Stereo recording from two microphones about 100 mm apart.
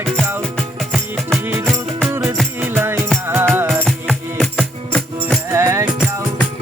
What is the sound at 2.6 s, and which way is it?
Music, 25° right (ahead or behind).